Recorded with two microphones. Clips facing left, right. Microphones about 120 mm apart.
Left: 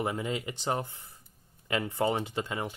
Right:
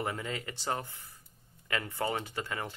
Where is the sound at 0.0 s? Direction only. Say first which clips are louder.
Left 4 dB; 15° left (ahead or behind).